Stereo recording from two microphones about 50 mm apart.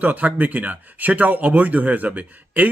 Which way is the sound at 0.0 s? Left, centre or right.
Right.